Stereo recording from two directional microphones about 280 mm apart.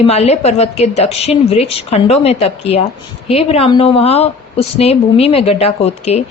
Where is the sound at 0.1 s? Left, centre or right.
Left.